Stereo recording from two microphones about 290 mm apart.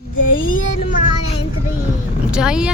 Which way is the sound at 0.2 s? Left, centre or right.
Left.